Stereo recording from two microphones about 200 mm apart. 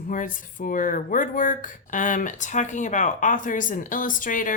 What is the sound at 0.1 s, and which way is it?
A woman's voice, 40° left (ahead or behind).